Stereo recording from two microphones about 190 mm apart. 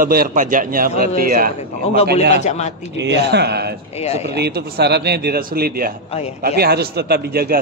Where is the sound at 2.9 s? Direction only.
65° right (ahead or behind).